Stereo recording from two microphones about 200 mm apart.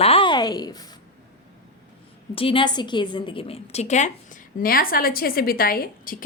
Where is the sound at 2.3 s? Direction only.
25° left (ahead or behind).